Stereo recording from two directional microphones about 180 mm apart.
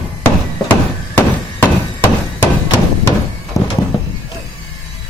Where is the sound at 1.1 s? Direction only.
10° left (ahead or behind).